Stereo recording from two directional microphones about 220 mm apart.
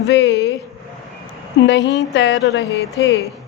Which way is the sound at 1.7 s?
55° left (ahead or behind).